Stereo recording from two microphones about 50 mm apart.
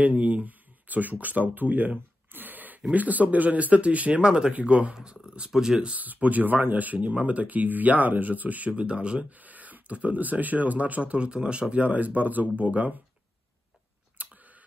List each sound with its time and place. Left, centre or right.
0.0 s speech: right
5.9 s speech: right
9.4 s speech: right
14.1 s a sound: right